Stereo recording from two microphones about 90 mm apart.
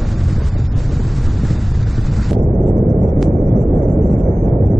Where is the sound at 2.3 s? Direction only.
Centre (ahead or behind).